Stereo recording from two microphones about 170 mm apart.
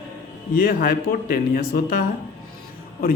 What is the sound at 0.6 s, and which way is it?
A man's voice, 55° left (ahead or behind).